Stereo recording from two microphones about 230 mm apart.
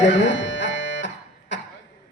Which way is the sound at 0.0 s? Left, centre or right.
Left.